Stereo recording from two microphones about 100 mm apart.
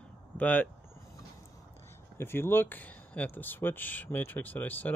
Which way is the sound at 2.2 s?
25° left (ahead or behind).